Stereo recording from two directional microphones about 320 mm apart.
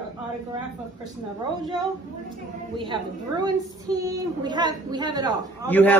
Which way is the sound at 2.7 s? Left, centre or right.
Centre.